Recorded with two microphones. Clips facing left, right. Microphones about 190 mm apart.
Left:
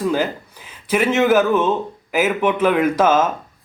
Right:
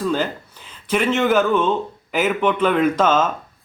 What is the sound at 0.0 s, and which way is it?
Speech, 10° left (ahead or behind).